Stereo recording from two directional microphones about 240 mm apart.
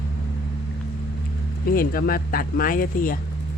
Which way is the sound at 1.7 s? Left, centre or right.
Left.